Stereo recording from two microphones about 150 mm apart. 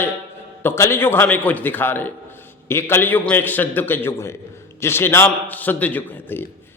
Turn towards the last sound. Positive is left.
turn(degrees=15)  # may be behind; listen again after turning